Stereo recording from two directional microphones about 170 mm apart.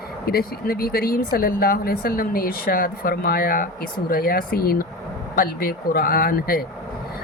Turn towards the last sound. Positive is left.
turn(degrees=60)  # may be behind; listen again after turning